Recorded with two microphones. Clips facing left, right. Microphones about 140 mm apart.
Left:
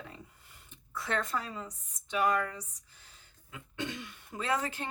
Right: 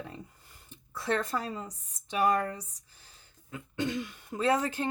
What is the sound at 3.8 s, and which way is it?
Speech, 40° right (ahead or behind).